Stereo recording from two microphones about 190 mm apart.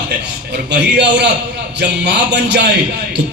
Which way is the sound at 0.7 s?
65° right (ahead or behind).